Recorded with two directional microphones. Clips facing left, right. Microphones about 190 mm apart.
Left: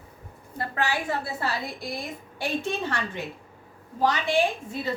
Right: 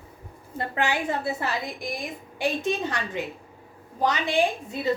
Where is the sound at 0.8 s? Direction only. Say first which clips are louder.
Right 2 dB; 20° right (ahead or behind).